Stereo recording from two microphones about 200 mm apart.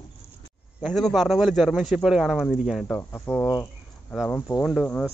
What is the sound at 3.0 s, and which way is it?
A man's voice, 10° left (ahead or behind).